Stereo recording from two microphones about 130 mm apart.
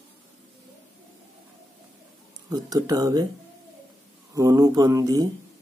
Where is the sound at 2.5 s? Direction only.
30° right (ahead or behind).